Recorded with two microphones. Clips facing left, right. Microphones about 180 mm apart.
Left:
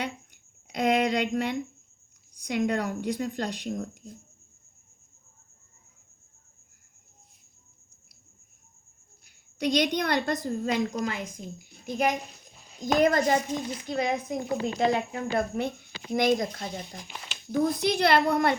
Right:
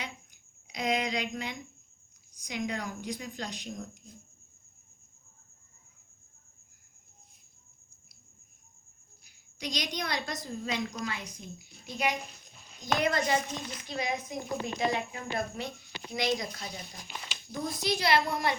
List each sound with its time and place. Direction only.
0.7 s a woman's voice: 60° left (ahead or behind)
9.6 s a woman's voice: 60° left (ahead or behind); by 13.4 s 45° left (ahead or behind)
13.8 s a woman's voice: 55° left (ahead or behind)